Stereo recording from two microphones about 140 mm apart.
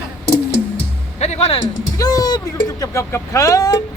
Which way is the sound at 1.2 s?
50° left (ahead or behind).